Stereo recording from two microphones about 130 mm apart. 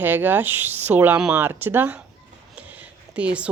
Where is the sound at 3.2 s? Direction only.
10° right (ahead or behind).